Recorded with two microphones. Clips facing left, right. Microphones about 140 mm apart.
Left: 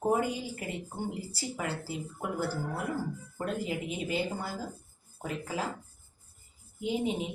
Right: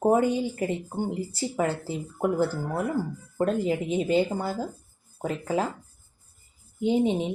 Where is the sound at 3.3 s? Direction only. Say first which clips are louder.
Right 10 dB; 35° right (ahead or behind).